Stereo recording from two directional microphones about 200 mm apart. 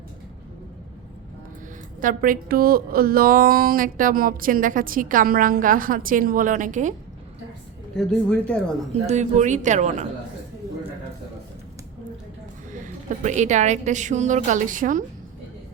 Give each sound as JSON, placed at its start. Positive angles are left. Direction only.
{"t": 2.0, "sound": "a woman's voice", "side_deg": -45}
{"t": 7.9, "sound": "speech", "side_deg": 5}
{"t": 9.0, "sound": "a woman's voice", "side_deg": -35}
{"t": 13.1, "sound": "a woman's voice", "side_deg": -35}